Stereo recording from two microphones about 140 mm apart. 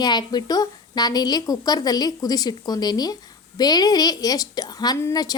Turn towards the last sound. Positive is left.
turn(degrees=25)  # may be behind; listen again after turning